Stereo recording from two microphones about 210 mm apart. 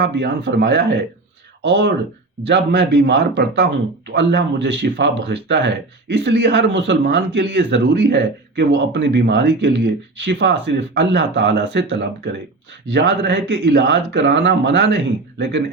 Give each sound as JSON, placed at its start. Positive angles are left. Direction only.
{"t": 0.0, "sound": "speech", "side_deg": -55}